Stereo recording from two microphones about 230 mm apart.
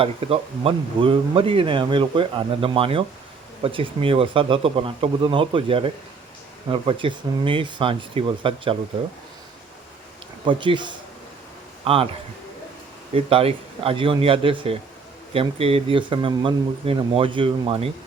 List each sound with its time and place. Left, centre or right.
0.0 s speech: right
10.4 s speech: right
13.1 s speech: right